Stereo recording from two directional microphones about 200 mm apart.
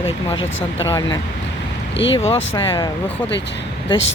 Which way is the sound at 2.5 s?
15° left (ahead or behind).